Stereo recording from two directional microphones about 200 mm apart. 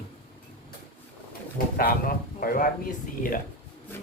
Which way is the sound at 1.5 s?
45° left (ahead or behind).